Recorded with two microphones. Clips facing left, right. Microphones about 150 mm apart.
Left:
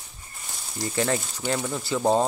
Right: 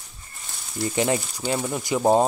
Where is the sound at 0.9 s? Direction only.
15° right (ahead or behind).